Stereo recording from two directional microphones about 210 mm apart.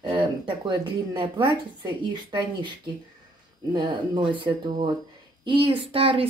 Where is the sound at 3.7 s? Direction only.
20° right (ahead or behind).